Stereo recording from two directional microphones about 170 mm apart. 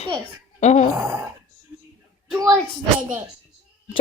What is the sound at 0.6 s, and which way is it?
Speech, 45° left (ahead or behind).